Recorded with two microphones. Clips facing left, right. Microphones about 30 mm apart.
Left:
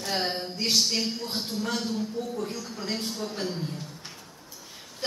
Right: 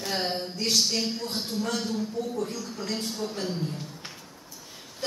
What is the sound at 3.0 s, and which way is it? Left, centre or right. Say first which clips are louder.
Speech: even; centre.